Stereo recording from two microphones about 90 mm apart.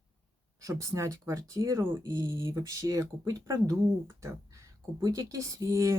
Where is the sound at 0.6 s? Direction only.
35° right (ahead or behind).